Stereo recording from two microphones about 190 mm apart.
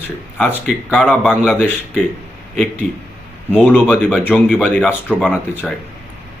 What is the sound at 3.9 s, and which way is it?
A man's voice, 10° left (ahead or behind).